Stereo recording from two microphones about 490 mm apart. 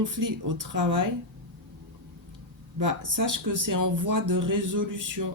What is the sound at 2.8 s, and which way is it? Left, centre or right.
Speech, right.